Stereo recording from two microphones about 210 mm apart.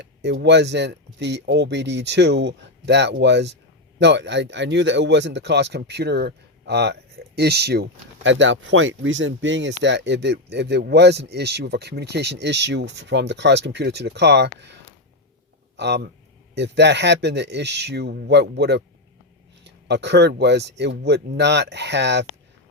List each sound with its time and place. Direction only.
0.0 s speech: 55° right (ahead or behind)
15.8 s speech: 55° right (ahead or behind)